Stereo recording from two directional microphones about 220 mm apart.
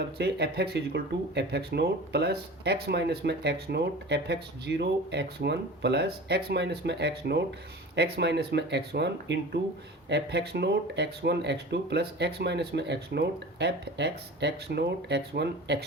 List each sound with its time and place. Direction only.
0.2 s speech: 45° right (ahead or behind)